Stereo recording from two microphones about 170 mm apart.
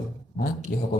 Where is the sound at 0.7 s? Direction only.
60° left (ahead or behind).